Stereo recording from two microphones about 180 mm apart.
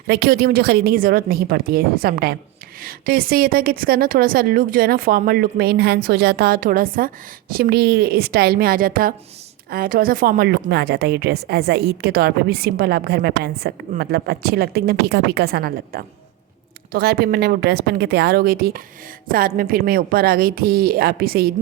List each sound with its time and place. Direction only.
0.1 s a woman's voice: 60° right (ahead or behind)